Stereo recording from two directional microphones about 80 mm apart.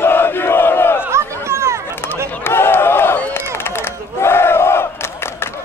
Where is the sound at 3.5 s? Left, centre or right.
Left.